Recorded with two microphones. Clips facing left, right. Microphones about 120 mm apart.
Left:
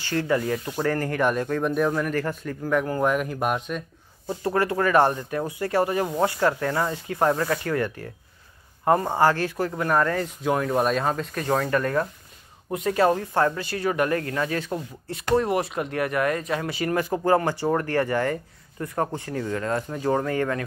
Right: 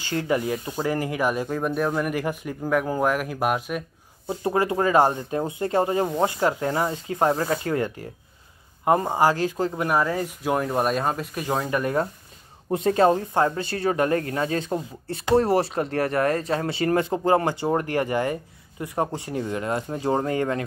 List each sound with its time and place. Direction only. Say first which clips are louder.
0.0 s speech: even; 20° right (ahead or behind)
4.3 s speech: right 1 dB; 20° right (ahead or behind)
9.9 s speech: even; 10° right (ahead or behind)
12.7 s speech: right 2 dB; 30° right (ahead or behind)